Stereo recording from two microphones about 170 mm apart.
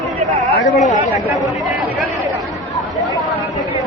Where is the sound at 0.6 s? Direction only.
45° left (ahead or behind).